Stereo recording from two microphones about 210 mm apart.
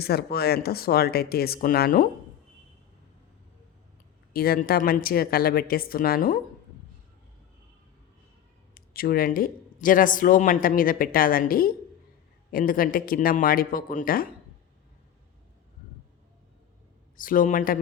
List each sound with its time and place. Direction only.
0.0 s speech: 50° left (ahead or behind)
4.3 s speech: 45° left (ahead or behind)
8.7 s speech: 45° left (ahead or behind)
17.2 s a man's voice: 40° left (ahead or behind)